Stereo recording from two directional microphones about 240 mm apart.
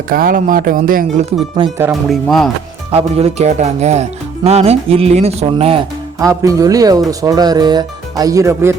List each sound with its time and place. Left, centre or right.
0.1 s speech: right
2.0 s speech: centre
2.9 s speech: right
6.1 s speech: centre